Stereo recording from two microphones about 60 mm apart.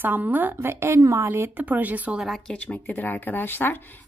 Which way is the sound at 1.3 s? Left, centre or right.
Right.